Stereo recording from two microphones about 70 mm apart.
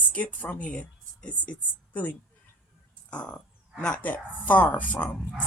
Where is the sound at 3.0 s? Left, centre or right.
Centre.